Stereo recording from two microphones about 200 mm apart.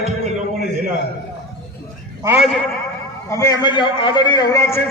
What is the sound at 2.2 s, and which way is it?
Speech, 10° right (ahead or behind).